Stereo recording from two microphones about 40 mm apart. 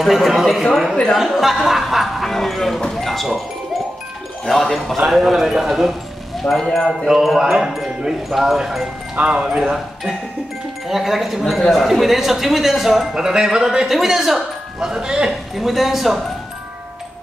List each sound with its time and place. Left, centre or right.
0.0 s speech: centre
4.5 s speech: centre
7.1 s speech: centre
9.1 s speech: right
9.6 s speech: centre
13.1 s speech: centre
13.8 s speech: centre
15.5 s speech: centre